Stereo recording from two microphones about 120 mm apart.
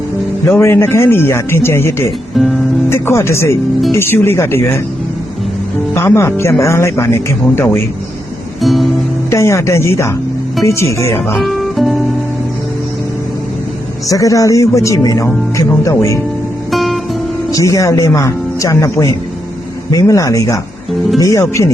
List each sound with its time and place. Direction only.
0.4 s speech: 20° left (ahead or behind)
2.3 s music: centre (ahead or behind)
2.9 s speech: 20° left (ahead or behind)
5.9 s speech: 20° left (ahead or behind)
8.6 s music: centre (ahead or behind)
9.3 s speech: 25° left (ahead or behind)
11.3 s guitar: centre (ahead or behind)
14.1 s speech: 30° left (ahead or behind)
16.7 s music: centre (ahead or behind)
17.5 s speech: 30° left (ahead or behind)